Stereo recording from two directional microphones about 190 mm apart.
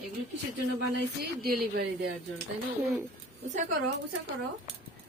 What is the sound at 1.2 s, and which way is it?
Speech, 55° right (ahead or behind).